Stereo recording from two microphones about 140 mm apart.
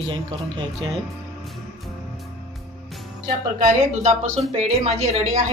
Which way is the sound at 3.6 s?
55° right (ahead or behind).